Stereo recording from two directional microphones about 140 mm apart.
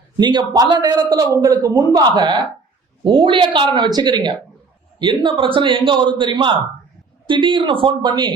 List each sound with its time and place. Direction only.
0.2 s a man's voice: 30° right (ahead or behind)